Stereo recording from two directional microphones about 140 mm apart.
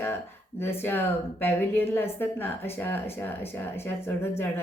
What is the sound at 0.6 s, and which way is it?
A woman's voice, 15° left (ahead or behind).